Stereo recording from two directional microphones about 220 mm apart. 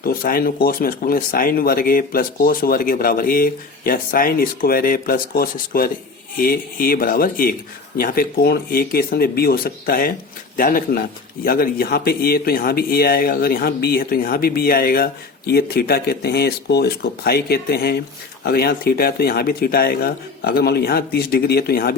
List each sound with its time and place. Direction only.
0.0 s speech: 40° left (ahead or behind)